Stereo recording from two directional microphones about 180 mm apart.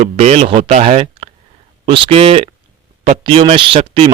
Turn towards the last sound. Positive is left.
turn(degrees=-30)  # may be behind; listen again after turning